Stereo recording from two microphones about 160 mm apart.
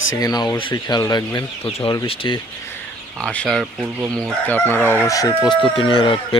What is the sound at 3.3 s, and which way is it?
Speech, 5° left (ahead or behind).